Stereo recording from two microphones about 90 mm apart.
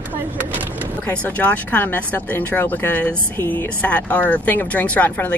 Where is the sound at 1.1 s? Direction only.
20° left (ahead or behind).